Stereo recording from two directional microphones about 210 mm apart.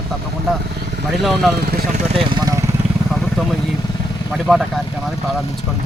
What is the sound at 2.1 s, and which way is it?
Speech, 25° right (ahead or behind).